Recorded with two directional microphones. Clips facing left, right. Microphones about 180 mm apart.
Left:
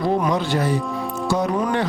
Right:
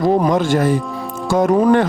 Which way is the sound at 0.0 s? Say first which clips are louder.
Right 5 dB; 45° right (ahead or behind).